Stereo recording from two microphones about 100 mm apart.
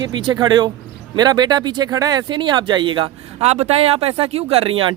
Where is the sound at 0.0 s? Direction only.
45° right (ahead or behind).